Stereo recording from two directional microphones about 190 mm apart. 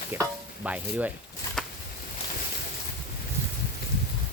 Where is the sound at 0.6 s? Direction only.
10° right (ahead or behind).